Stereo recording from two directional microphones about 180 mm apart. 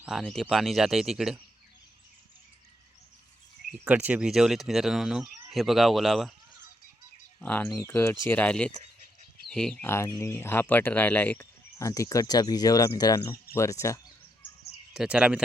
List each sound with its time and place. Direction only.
0.0 s speech: centre (ahead or behind)
3.7 s speech: 10° right (ahead or behind)
7.4 s speech: 10° left (ahead or behind)
9.9 s speech: 15° left (ahead or behind)
14.9 s speech: 5° right (ahead or behind)